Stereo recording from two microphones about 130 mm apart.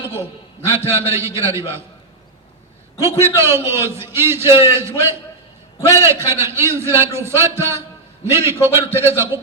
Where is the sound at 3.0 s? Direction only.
20° right (ahead or behind).